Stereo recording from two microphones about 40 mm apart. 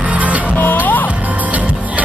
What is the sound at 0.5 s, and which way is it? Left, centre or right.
Music, left.